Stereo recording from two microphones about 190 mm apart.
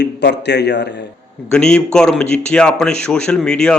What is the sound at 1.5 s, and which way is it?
Speech, 5° left (ahead or behind).